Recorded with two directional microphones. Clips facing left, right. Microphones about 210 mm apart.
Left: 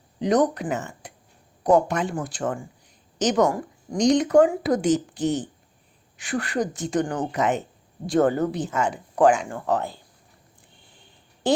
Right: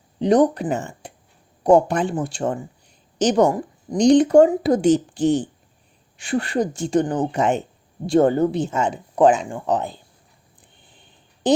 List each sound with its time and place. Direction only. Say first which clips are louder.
0.2 s speech: right 4 dB; 30° right (ahead or behind)
11.4 s speech: right 4 dB; 20° right (ahead or behind)